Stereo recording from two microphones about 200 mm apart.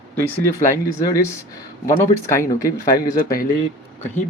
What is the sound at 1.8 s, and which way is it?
Speech, 15° left (ahead or behind).